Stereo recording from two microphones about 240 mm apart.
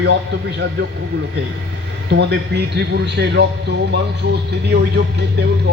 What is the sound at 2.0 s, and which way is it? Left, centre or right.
A man's voice, right.